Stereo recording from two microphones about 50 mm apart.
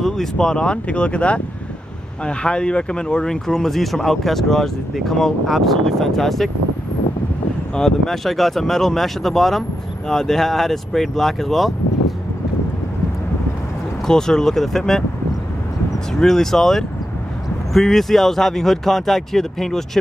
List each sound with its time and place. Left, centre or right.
0.0 s speech: centre
7.7 s speech: centre
14.0 s speech: centre
16.2 s speech: centre